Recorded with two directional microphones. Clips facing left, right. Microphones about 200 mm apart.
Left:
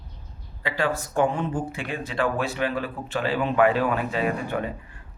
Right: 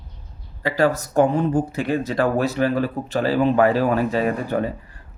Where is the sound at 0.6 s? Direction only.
40° right (ahead or behind).